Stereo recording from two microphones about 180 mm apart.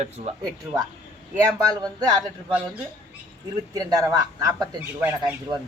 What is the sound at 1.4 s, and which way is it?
Speech, 20° right (ahead or behind).